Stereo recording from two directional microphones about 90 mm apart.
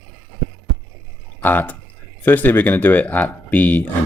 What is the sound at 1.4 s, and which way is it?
Speech, 20° left (ahead or behind).